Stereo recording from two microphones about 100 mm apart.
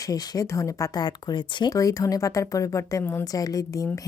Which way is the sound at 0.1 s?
35° left (ahead or behind).